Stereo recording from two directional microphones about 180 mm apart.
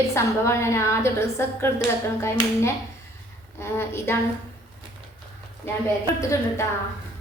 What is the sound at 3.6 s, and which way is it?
Speech, 15° left (ahead or behind).